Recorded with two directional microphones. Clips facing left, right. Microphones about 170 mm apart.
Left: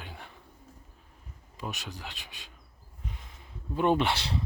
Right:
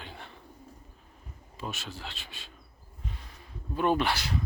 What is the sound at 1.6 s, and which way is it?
Speech, 15° left (ahead or behind).